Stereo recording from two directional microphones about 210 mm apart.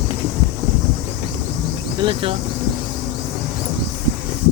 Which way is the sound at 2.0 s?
25° right (ahead or behind).